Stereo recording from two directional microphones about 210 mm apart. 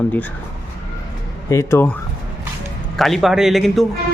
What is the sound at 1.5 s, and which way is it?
Speech, 15° left (ahead or behind).